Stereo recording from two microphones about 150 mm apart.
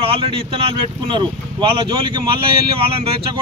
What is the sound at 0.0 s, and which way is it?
Speech, 40° right (ahead or behind).